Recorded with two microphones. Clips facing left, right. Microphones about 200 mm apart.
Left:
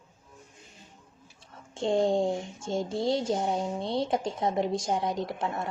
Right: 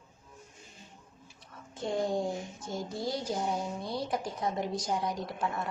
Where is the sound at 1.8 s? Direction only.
25° left (ahead or behind).